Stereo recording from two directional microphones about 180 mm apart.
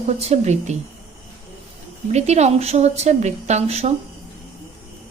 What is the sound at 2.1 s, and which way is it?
A woman's voice, 40° right (ahead or behind).